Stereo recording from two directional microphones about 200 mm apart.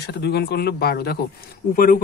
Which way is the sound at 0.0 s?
55° left (ahead or behind).